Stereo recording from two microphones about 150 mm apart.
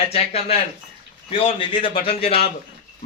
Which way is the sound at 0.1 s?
40° left (ahead or behind).